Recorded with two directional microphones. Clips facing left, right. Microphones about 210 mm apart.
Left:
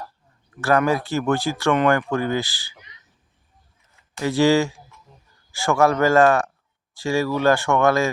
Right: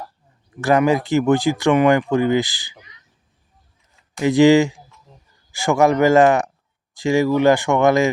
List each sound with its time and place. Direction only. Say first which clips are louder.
0.5 s speech: right 3 dB; 15° right (ahead or behind)
4.1 s speech: right 5 dB; 15° right (ahead or behind)